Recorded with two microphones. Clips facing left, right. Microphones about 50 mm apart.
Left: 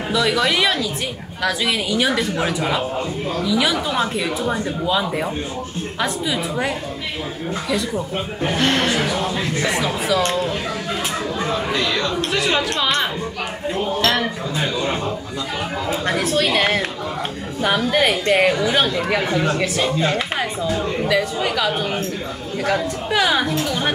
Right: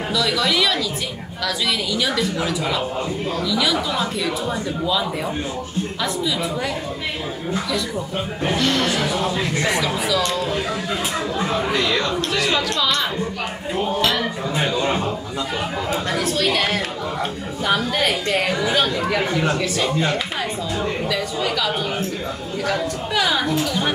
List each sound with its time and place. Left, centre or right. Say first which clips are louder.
0.1 s a woman's voice: left 3 dB; left
8.5 s a woman's voice: left 2 dB; left
11.7 s speech: right 1 dB; right
12.2 s speech: left 1 dB; left
14.6 s a man's voice: right 1 dB; right
15.9 s speech: left 3 dB; left
19.5 s a woman's voice: left 1 dB; left
23.1 s speech: left 2 dB; left